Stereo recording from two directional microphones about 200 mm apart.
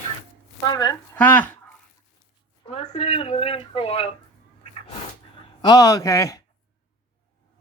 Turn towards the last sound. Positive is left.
turn(degrees=15)  # may be behind; listen again after turning